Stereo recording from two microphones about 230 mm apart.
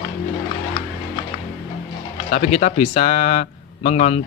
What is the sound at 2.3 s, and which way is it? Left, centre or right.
A man's voice, left.